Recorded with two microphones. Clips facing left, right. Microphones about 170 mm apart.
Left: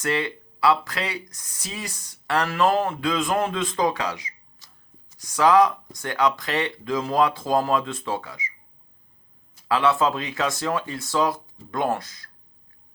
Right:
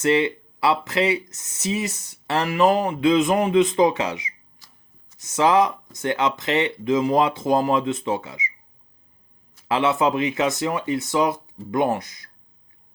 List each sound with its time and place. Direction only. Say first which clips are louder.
0.0 s speech: right 6 dB; 20° right (ahead or behind)
9.6 s speech: right 1 dB; 20° right (ahead or behind)